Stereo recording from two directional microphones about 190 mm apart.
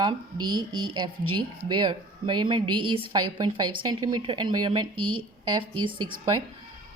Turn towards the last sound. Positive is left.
turn(degrees=-25)  # may be behind; listen again after turning